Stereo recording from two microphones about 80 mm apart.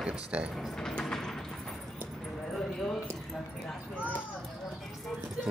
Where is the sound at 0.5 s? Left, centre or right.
Centre.